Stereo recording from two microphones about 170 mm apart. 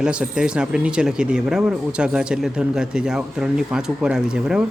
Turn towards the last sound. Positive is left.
turn(degrees=-5)  # may be behind; listen again after turning